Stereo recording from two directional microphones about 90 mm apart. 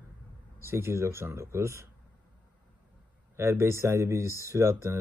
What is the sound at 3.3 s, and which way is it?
Speech, 30° right (ahead or behind).